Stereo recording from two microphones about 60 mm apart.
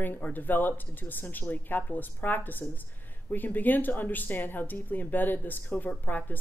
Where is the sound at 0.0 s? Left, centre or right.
Left.